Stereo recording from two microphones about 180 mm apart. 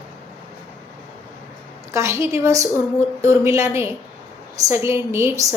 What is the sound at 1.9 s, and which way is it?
A woman's voice, 15° right (ahead or behind).